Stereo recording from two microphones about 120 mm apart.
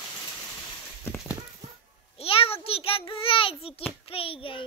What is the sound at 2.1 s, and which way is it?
A child's voice, 50° left (ahead or behind).